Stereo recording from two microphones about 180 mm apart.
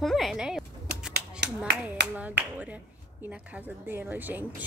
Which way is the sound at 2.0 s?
70° right (ahead or behind).